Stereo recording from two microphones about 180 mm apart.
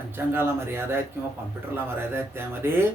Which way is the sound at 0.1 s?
10° right (ahead or behind).